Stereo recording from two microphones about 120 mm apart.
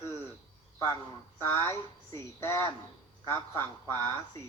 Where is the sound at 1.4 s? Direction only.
20° left (ahead or behind).